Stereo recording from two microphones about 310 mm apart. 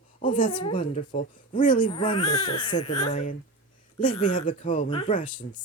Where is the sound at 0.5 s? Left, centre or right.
Left.